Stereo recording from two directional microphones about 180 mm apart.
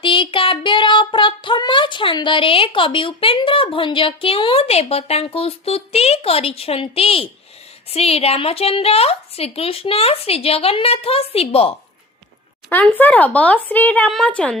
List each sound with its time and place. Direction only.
0.0 s child singing: 30° left (ahead or behind)
7.9 s a woman's voice: 35° left (ahead or behind)
12.7 s speech: 10° left (ahead or behind)